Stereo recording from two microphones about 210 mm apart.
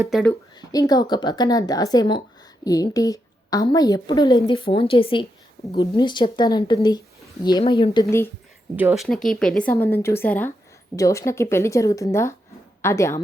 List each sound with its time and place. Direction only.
0.1 s speech: 5° left (ahead or behind)
0.7 s a woman's voice: 15° left (ahead or behind)
8.7 s speech: 10° right (ahead or behind)
9.0 s a woman's voice: 5° left (ahead or behind)